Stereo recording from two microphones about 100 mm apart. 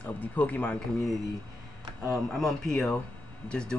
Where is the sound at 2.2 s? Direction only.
5° left (ahead or behind).